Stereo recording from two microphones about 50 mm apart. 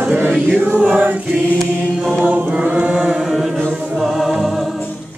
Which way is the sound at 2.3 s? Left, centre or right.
Right.